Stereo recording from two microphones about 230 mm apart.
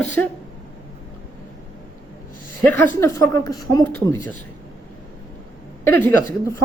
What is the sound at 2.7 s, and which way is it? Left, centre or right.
Speech, centre.